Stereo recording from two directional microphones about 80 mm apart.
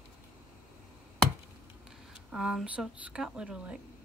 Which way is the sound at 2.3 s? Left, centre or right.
Centre.